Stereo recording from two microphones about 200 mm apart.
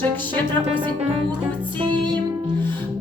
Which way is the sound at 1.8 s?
25° right (ahead or behind).